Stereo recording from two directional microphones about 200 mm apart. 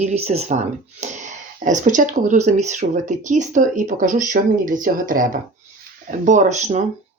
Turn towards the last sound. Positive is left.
turn(degrees=-35)  # may be behind; listen again after turning